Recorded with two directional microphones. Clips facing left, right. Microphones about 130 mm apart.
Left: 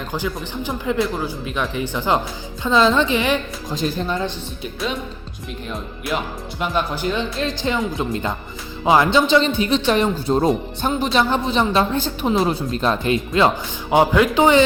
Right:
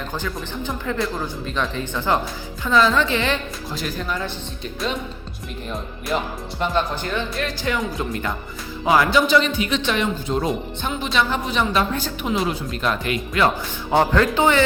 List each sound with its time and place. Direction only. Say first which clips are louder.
0.1 s speech: left 3 dB; 15° left (ahead or behind)
4.6 s speech: left 1 dB; centre (ahead or behind)
6.6 s a man's voice: even; 10° left (ahead or behind); by 13.5 s 25° left (ahead or behind)
13.9 s speech: left 2 dB; 10° left (ahead or behind)